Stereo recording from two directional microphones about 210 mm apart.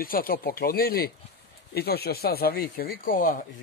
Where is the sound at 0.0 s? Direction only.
45° left (ahead or behind).